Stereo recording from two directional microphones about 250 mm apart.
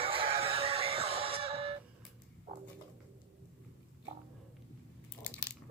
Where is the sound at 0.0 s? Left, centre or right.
Right.